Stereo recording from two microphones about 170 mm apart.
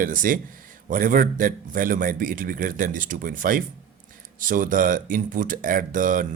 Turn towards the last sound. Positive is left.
turn(degrees=-50)  # may be behind; listen again after turning